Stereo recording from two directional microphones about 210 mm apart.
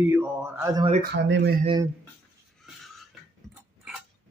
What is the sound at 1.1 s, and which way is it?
Speech, 55° right (ahead or behind).